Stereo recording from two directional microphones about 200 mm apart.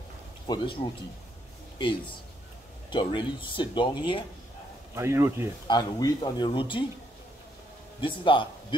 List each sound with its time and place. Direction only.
0.5 s speech: 25° left (ahead or behind)
2.9 s speech: 25° left (ahead or behind)
4.9 s speech: 15° right (ahead or behind)
5.7 s speech: 20° left (ahead or behind)
8.0 s a man's voice: 25° left (ahead or behind)